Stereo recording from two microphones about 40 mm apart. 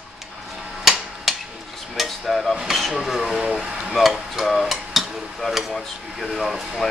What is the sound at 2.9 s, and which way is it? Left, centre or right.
Speech, centre.